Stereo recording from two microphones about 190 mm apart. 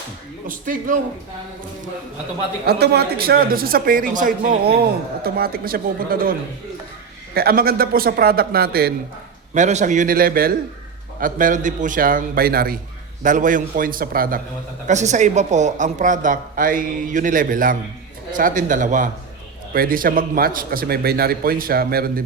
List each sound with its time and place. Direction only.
0.4 s a man's voice: 45° right (ahead or behind)
2.6 s a man's voice: 60° right (ahead or behind)
7.3 s a man's voice: 50° right (ahead or behind)
9.6 s a man's voice: 40° right (ahead or behind)
14.8 s a man's voice: 40° right (ahead or behind)